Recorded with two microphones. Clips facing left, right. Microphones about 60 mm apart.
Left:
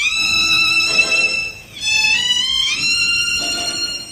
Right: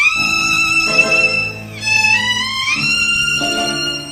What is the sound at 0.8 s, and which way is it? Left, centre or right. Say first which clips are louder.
Music: right 4 dB; right.